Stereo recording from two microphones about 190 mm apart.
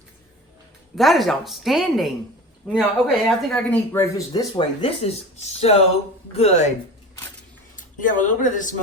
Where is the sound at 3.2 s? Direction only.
5° left (ahead or behind); by 6.7 s 35° left (ahead or behind).